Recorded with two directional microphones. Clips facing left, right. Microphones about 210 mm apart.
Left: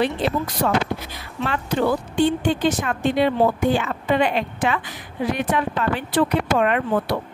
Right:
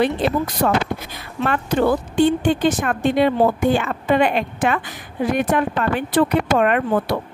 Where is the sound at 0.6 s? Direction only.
50° right (ahead or behind).